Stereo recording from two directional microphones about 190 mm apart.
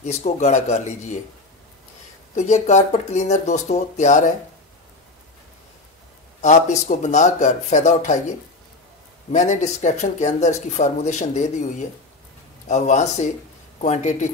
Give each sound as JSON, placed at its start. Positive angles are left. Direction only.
{"t": 0.0, "sound": "speech", "side_deg": 35}
{"t": 2.3, "sound": "speech", "side_deg": 40}
{"t": 6.4, "sound": "speech", "side_deg": 40}
{"t": 9.3, "sound": "speech", "side_deg": 40}
{"t": 12.6, "sound": "speech", "side_deg": 35}